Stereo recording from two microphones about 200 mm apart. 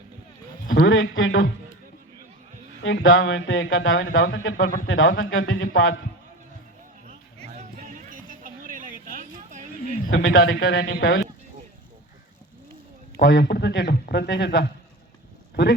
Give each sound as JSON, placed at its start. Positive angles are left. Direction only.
{"t": 0.9, "sound": "speech", "side_deg": 75}
{"t": 2.8, "sound": "speech", "side_deg": 75}
{"t": 4.6, "sound": "speech", "side_deg": 45}
{"t": 4.9, "sound": "speech", "side_deg": 75}
{"t": 7.3, "sound": "music", "side_deg": -35}
{"t": 10.1, "sound": "speech", "side_deg": 80}
{"t": 10.9, "sound": "speech", "side_deg": 50}
{"t": 13.1, "sound": "a man's voice", "side_deg": 60}